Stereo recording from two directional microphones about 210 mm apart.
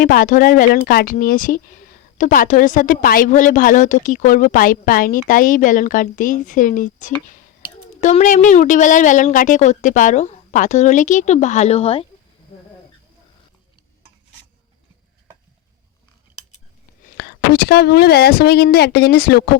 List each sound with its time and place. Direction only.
0.0 s a woman's voice: 45° left (ahead or behind); by 12.0 s 25° left (ahead or behind)
17.2 s a woman's voice: 50° left (ahead or behind)